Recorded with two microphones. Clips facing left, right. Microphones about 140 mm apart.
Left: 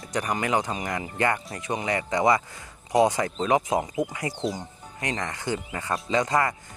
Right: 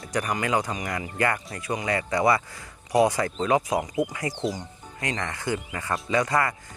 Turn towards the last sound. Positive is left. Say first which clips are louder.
# even
turn(degrees=20)  # may be behind; listen again after turning